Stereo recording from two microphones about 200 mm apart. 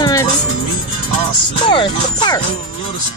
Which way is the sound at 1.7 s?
25° left (ahead or behind).